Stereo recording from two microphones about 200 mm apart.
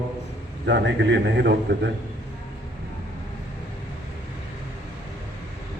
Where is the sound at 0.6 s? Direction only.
60° right (ahead or behind).